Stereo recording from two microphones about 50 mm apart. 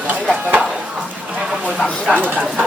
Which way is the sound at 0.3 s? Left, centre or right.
Right.